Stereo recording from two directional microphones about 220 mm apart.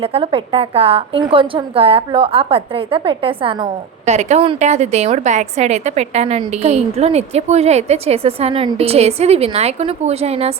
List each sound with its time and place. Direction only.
0.0 s a woman's voice: 25° right (ahead or behind)